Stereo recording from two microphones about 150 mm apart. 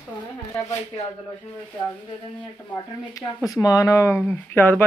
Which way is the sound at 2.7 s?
25° left (ahead or behind).